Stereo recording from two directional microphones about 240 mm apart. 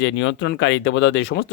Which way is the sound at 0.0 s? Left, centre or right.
Left.